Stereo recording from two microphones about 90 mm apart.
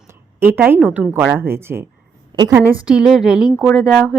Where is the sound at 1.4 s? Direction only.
25° right (ahead or behind).